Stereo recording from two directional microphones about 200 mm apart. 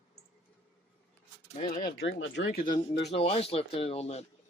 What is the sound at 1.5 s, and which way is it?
Speech, 25° left (ahead or behind).